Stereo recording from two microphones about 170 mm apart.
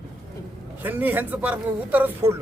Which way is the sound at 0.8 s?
10° right (ahead or behind).